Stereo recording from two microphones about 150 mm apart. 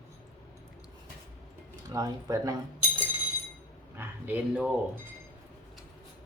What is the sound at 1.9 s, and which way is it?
Speech, 25° right (ahead or behind).